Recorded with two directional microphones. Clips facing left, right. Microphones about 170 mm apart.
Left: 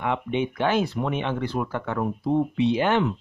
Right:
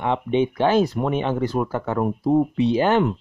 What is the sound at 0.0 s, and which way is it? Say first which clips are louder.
Speech: right 5 dB; 30° right (ahead or behind).